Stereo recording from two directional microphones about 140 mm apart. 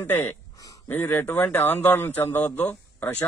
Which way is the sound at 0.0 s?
15° left (ahead or behind).